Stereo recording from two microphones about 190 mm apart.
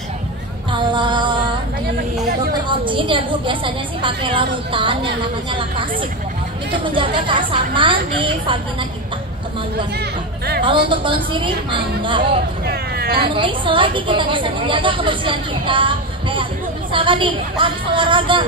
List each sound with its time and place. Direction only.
0.7 s music: 25° right (ahead or behind)
2.8 s a woman's voice: 25° right (ahead or behind)
9.9 s a sound: 55° right (ahead or behind)
10.9 s a woman's voice: 25° right (ahead or behind)
12.6 s hubbub: 55° right (ahead or behind)
13.3 s a woman's voice: 25° right (ahead or behind)